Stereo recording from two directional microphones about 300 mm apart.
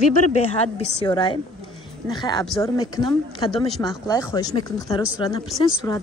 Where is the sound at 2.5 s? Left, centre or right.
Centre.